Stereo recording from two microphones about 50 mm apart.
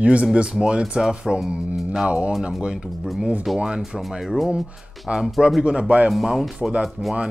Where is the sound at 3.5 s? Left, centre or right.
Centre.